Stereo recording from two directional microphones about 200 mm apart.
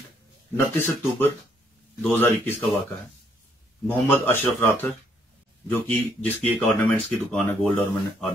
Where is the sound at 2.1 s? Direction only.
10° left (ahead or behind).